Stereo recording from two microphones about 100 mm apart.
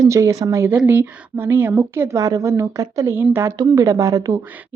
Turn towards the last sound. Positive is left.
turn(degrees=-35)  # may be behind; listen again after turning